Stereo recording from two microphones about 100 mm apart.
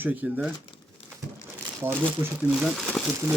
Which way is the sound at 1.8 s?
25° right (ahead or behind).